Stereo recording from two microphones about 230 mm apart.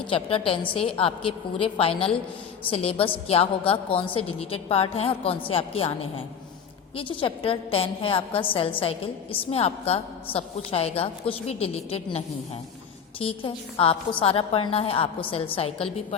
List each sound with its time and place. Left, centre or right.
0.1 s a woman's voice: left
6.9 s a woman's voice: left